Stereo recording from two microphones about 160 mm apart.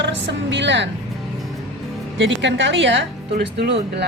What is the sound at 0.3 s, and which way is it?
Speech, 90° right.